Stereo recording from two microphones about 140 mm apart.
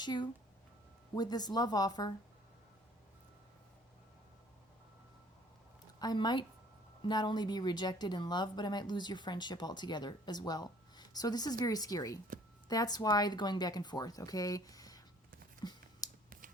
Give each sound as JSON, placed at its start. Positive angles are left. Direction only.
{"t": 0.0, "sound": "speech", "side_deg": 30}
{"t": 6.0, "sound": "speech", "side_deg": 30}
{"t": 15.6, "sound": "a sound", "side_deg": 30}